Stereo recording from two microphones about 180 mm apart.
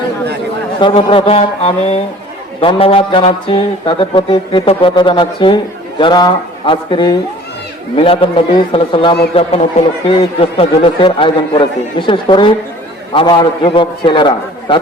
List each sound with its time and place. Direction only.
0.8 s speech: 30° left (ahead or behind)